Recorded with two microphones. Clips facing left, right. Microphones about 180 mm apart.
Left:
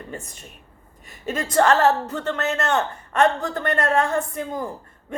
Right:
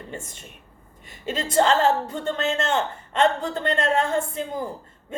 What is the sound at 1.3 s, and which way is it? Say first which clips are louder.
A woman's voice: left 2 dB; 25° right (ahead or behind).